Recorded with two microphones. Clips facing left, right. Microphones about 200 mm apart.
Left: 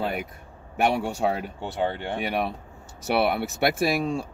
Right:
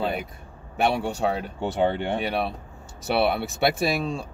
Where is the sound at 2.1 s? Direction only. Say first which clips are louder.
Right 1 dB; 10° left (ahead or behind).